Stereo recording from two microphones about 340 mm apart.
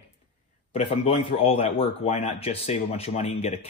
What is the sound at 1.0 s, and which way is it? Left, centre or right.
Speech, centre.